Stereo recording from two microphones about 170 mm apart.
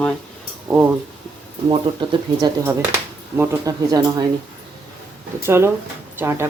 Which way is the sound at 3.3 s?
15° right (ahead or behind).